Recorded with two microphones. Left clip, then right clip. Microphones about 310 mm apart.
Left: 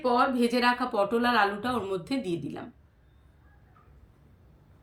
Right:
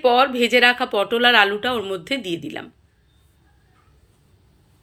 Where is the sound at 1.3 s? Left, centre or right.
Centre.